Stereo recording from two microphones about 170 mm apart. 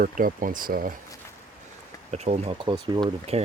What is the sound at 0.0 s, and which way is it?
Speech, 55° right (ahead or behind).